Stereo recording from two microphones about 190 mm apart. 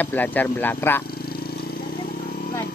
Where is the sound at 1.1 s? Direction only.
55° left (ahead or behind).